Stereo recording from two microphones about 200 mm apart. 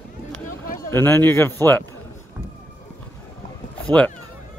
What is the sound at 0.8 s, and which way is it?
A man's voice, 10° left (ahead or behind).